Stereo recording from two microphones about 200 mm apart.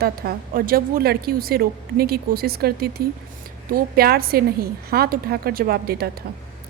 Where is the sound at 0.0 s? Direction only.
50° right (ahead or behind).